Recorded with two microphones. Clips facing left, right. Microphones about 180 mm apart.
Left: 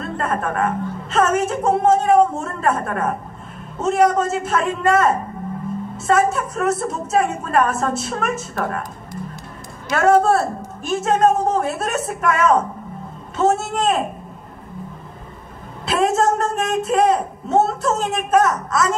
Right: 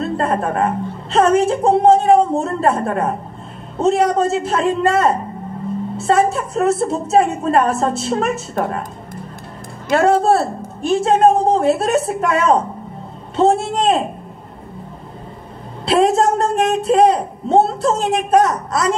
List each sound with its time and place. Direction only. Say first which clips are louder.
0.0 s a woman's voice: right 4 dB; 30° right (ahead or behind)
9.8 s a woman's voice: right 1 dB; 30° right (ahead or behind)
15.8 s a woman's voice: right 4 dB; 30° right (ahead or behind)